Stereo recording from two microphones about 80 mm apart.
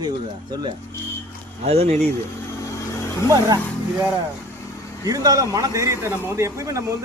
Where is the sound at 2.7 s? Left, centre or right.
Left.